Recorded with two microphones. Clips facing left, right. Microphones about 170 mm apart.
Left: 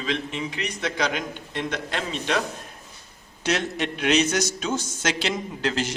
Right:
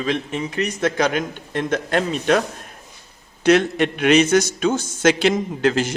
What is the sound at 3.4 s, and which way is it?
A man's voice, 55° right (ahead or behind).